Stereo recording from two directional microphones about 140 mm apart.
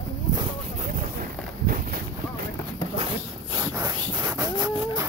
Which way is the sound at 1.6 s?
90° right.